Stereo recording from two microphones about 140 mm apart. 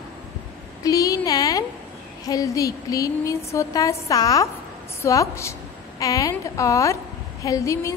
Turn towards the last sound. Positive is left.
turn(degrees=20)  # may be behind; listen again after turning